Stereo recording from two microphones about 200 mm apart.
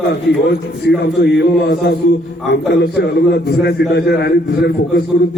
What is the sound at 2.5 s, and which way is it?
A man's voice, 55° left (ahead or behind).